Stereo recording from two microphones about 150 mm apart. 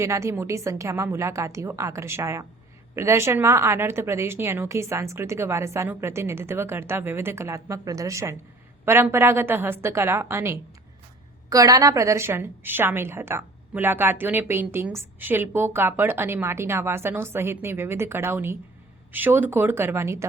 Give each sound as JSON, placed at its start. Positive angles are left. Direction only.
{"t": 0.0, "sound": "a woman's voice", "side_deg": -20}